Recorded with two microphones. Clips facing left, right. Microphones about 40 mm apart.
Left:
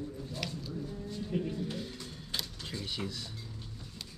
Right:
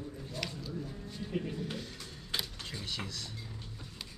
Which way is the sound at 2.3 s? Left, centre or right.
Centre.